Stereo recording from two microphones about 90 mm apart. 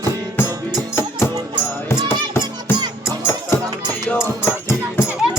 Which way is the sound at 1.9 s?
25° left (ahead or behind).